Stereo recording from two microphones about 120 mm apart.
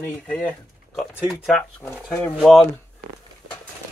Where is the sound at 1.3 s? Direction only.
Centre (ahead or behind).